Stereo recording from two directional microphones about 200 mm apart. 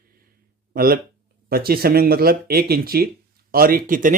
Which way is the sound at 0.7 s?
50° right (ahead or behind).